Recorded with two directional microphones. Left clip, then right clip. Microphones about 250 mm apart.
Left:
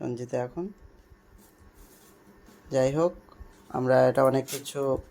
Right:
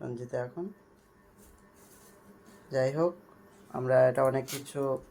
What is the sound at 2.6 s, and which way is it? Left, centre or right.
Speech, left.